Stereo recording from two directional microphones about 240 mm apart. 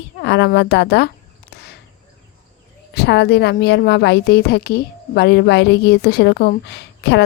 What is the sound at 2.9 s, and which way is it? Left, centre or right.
A woman's voice, left.